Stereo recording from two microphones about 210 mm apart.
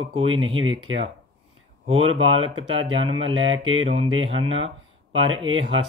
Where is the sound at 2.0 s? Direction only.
70° right (ahead or behind).